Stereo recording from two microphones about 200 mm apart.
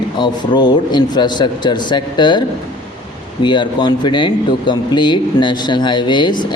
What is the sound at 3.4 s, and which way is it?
Speech, 25° left (ahead or behind).